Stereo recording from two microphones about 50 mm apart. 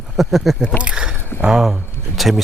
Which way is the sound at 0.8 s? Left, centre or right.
Centre.